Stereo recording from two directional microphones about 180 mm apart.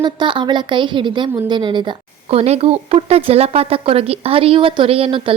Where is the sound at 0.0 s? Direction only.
25° right (ahead or behind).